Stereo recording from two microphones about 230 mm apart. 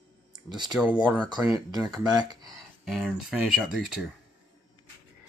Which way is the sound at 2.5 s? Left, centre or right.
Centre.